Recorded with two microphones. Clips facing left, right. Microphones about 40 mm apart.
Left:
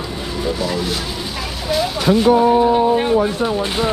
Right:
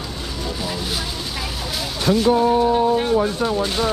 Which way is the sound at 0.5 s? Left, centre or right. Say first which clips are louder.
Left 5 dB; centre.